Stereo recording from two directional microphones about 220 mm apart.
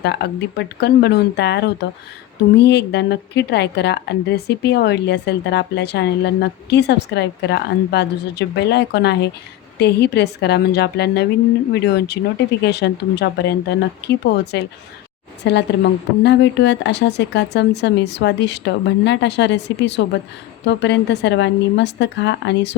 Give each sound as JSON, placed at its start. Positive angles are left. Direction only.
{"t": 0.0, "sound": "a woman's voice", "side_deg": 50}